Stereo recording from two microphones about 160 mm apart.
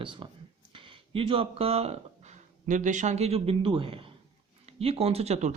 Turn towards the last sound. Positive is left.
turn(degrees=-45)  # may be behind; listen again after turning